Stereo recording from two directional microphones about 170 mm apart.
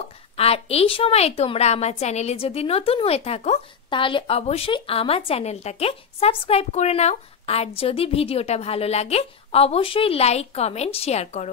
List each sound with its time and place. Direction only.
0.4 s a woman's voice: 35° left (ahead or behind)